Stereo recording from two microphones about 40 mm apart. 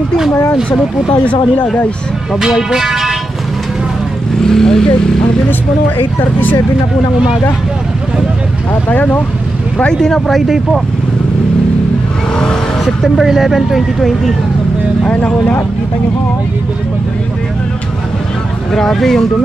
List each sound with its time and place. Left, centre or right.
2.7 s speech: centre
4.4 s speech: centre
8.8 s speech: left
9.9 s speech: centre
13.0 s speech: centre
15.0 s speech: left
18.7 s speech: centre